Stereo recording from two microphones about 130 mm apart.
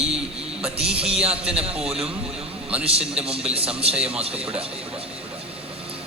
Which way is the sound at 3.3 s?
50° right (ahead or behind).